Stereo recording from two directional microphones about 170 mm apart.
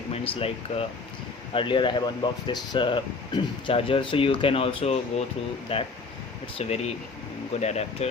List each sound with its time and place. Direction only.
0.1 s speech: 35° left (ahead or behind)